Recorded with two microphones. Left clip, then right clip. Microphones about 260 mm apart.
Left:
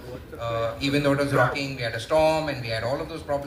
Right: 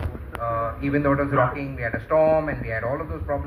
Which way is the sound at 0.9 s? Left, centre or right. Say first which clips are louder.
Right 1 dB; left.